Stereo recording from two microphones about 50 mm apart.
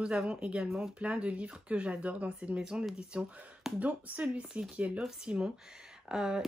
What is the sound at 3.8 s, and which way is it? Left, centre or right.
Speech, right.